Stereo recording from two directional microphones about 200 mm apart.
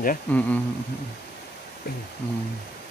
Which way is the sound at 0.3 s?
5° left (ahead or behind).